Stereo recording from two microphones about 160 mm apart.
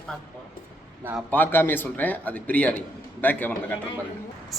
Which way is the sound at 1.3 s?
10° left (ahead or behind).